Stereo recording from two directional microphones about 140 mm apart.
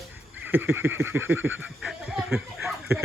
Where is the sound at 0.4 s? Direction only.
15° right (ahead or behind).